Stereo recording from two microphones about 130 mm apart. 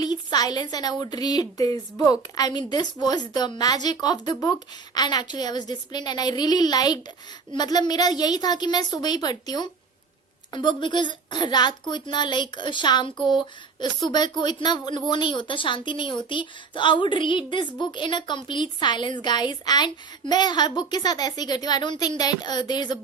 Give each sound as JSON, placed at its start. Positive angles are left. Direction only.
{"t": 0.0, "sound": "speech", "side_deg": 30}